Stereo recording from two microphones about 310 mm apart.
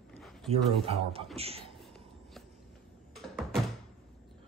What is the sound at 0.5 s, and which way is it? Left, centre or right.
A man's voice, centre.